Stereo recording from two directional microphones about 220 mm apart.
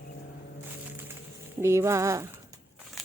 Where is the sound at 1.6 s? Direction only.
10° right (ahead or behind).